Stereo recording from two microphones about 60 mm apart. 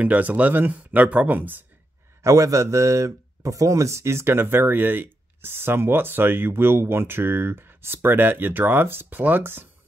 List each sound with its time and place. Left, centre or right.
0.0 s speech: right
2.2 s a man's voice: right